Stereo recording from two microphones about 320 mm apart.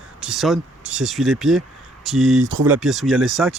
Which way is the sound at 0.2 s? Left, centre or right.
Centre.